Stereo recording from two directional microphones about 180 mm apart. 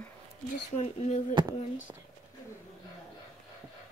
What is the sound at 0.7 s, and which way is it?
Speech, 40° left (ahead or behind).